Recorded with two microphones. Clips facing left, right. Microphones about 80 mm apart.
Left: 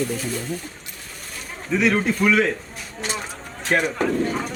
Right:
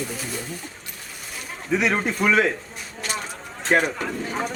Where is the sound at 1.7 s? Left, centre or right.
Centre.